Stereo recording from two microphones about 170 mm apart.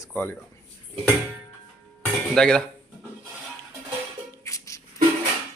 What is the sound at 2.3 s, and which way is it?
Speech, 5° left (ahead or behind).